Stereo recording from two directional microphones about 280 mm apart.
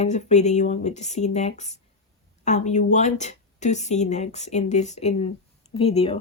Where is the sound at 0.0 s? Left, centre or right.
Left.